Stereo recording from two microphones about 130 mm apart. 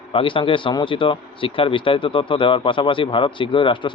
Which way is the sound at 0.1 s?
40° left (ahead or behind).